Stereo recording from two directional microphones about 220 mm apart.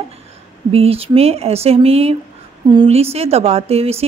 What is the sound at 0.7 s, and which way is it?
A woman's voice, 25° right (ahead or behind).